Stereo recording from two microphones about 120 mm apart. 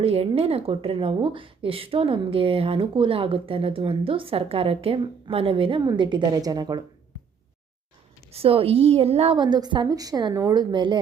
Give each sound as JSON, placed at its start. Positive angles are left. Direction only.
{"t": 0.0, "sound": "a woman's voice", "side_deg": -55}
{"t": 5.8, "sound": "a woman's voice", "side_deg": -35}
{"t": 8.3, "sound": "a woman's voice", "side_deg": -55}
{"t": 9.4, "sound": "a woman's voice", "side_deg": -35}